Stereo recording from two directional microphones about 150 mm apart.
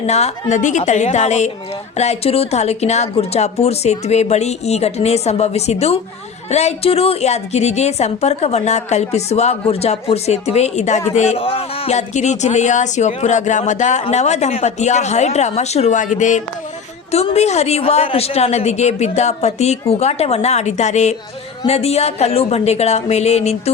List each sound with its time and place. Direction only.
0.0 s a woman's voice: 45° left (ahead or behind)